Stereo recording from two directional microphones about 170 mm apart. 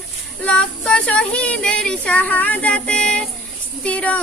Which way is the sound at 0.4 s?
5° left (ahead or behind).